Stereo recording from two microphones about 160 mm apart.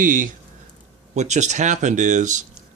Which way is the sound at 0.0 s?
55° right (ahead or behind).